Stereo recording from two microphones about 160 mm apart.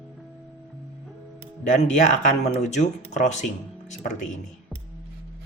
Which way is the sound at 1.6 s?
50° left (ahead or behind).